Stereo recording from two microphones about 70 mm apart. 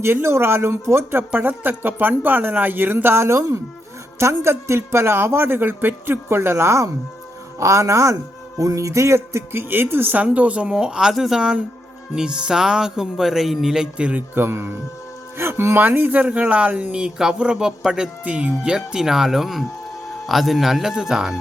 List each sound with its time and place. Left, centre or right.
0.0 s a man's voice: right
9.5 s speech: right; by 13.8 s centre
14.0 s speech: centre
14.3 s a man's voice: right; by 21.3 s centre